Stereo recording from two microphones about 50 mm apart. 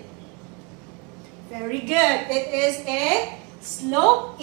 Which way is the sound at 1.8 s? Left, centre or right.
Centre.